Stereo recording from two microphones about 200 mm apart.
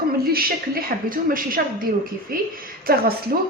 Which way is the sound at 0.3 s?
45° right (ahead or behind).